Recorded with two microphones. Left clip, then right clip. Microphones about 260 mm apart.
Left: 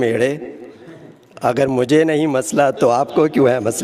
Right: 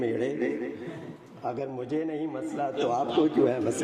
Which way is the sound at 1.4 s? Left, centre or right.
Left.